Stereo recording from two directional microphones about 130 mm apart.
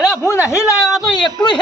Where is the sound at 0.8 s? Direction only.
Centre (ahead or behind).